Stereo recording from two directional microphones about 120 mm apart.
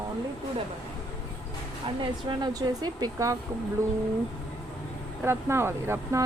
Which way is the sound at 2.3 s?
35° right (ahead or behind).